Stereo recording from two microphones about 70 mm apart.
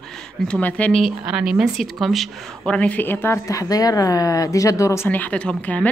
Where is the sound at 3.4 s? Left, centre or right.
Left.